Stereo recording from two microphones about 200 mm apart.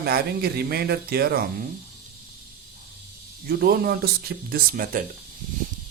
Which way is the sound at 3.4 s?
50° right (ahead or behind).